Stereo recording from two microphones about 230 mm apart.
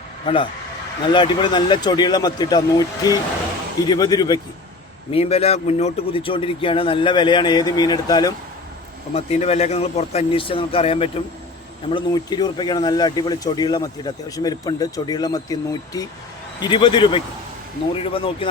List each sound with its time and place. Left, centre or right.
1.0 s speech: left
9.1 s speech: left